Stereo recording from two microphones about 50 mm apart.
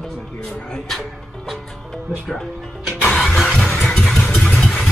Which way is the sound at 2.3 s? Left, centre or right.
Centre.